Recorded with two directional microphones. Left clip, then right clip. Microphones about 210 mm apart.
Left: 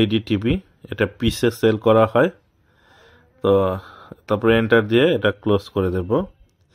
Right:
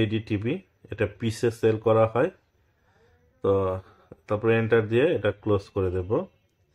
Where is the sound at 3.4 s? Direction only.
40° left (ahead or behind).